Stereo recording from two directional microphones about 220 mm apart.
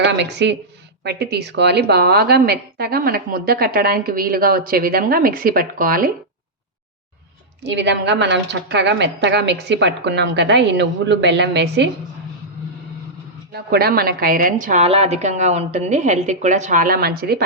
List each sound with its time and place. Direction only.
0.0 s a woman's voice: 50° right (ahead or behind)
7.6 s a woman's voice: 50° right (ahead or behind)
13.5 s a woman's voice: 45° right (ahead or behind)